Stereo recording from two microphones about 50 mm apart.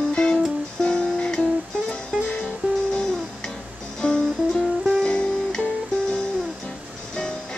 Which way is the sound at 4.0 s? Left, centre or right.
Centre.